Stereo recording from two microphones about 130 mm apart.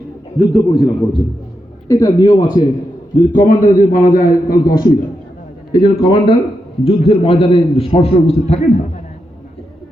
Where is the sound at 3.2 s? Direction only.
90° left.